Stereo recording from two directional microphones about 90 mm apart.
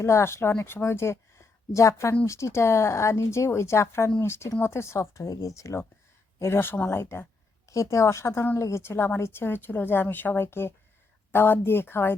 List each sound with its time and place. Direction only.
0.0 s a woman's voice: 30° left (ahead or behind)